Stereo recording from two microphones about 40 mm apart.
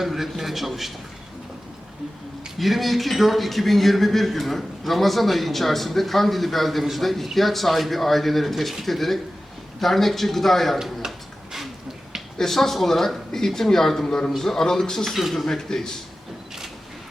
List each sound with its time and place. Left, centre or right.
0.0 s a man's voice: centre
2.6 s a man's voice: centre
10.8 s speech: centre
12.4 s a man's voice: centre
15.4 s speech: centre